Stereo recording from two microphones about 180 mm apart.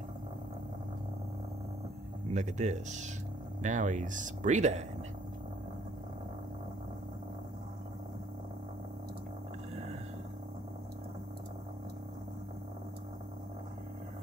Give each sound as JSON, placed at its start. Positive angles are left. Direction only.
{"t": 2.3, "sound": "speech", "side_deg": -40}